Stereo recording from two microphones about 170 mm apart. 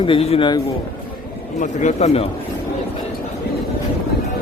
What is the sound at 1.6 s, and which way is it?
Speech, 45° left (ahead or behind).